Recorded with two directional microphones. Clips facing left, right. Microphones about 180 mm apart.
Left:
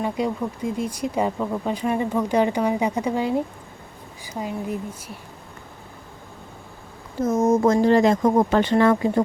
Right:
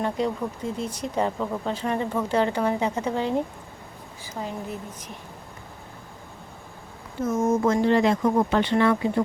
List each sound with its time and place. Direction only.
0.0 s speech: 10° left (ahead or behind)
4.4 s speech: 10° left (ahead or behind)
7.2 s speech: 40° left (ahead or behind)